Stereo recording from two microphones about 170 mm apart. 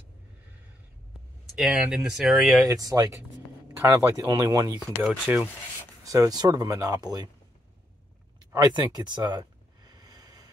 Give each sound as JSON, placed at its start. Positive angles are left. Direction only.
{"t": 1.6, "sound": "speech", "side_deg": -5}
{"t": 2.6, "sound": "speech", "side_deg": -20}
{"t": 5.0, "sound": "speech", "side_deg": -5}
{"t": 6.0, "sound": "speech", "side_deg": -20}
{"t": 8.5, "sound": "a sound", "side_deg": -20}